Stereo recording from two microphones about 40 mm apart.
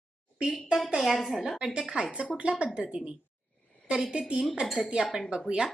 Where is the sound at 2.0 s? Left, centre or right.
Right.